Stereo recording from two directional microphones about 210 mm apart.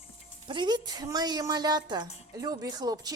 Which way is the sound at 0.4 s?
20° right (ahead or behind).